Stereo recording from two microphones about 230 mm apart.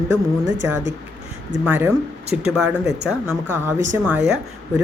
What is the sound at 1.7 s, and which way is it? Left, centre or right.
A woman's voice, centre.